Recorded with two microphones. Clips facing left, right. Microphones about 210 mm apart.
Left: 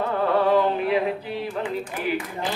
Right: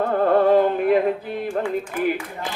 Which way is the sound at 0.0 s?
50° right (ahead or behind).